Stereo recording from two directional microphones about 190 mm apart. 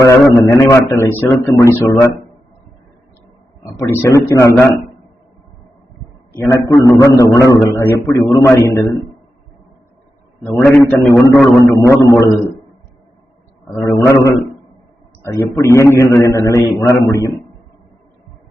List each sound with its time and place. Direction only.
0.0 s a man's voice: 15° left (ahead or behind)
3.8 s a man's voice: 15° left (ahead or behind)
6.3 s a man's voice: 15° left (ahead or behind)
10.7 s a man's voice: 10° left (ahead or behind)
13.8 s a man's voice: 15° left (ahead or behind)